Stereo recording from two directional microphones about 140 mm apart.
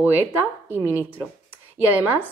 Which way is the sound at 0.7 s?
20° left (ahead or behind).